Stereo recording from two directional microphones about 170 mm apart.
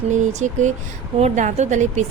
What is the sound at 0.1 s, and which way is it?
A woman's voice, 45° right (ahead or behind).